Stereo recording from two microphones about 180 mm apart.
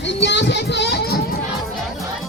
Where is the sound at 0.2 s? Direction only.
75° left (ahead or behind).